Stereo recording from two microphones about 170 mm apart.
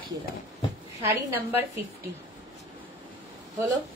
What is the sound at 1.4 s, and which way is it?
Speech, 10° right (ahead or behind).